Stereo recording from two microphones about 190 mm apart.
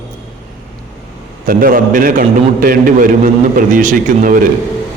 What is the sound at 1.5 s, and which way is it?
A man's voice, 45° right (ahead or behind).